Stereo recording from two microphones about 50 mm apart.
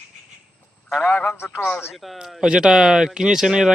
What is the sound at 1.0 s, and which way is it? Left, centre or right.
Speech, left.